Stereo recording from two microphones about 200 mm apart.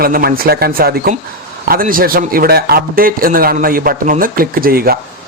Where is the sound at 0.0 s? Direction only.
50° right (ahead or behind).